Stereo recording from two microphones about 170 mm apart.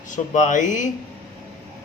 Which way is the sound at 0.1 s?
45° left (ahead or behind).